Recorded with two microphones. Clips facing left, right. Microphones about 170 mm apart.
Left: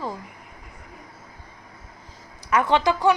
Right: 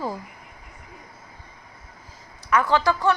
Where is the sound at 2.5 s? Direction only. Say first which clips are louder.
Left 1 dB; 20° left (ahead or behind).